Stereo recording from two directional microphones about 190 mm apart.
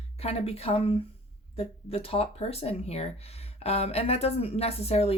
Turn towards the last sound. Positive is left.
turn(degrees=30)  # may be behind; listen again after turning